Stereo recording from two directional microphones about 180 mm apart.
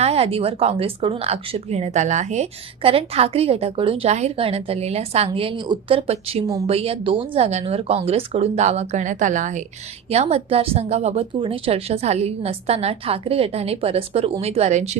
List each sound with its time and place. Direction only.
0.0 s a woman's voice: 35° right (ahead or behind)